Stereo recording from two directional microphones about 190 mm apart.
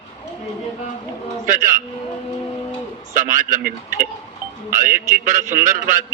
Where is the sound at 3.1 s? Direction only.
45° right (ahead or behind).